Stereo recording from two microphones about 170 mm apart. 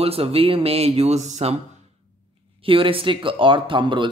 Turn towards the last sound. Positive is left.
turn(degrees=-30)  # may be behind; listen again after turning